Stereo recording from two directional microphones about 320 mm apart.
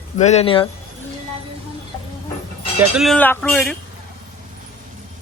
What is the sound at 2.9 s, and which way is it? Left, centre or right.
Speech, centre.